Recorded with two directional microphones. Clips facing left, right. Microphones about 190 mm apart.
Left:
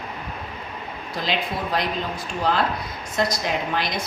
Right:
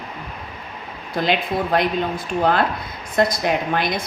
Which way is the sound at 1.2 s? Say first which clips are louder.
Right 5 dB; 55° right (ahead or behind).